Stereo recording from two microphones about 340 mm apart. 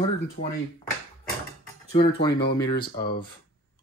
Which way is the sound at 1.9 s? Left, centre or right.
Centre.